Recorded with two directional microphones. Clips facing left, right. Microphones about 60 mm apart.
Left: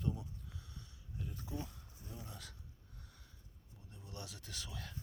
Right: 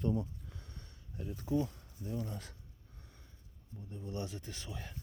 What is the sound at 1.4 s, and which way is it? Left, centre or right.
Speech, right.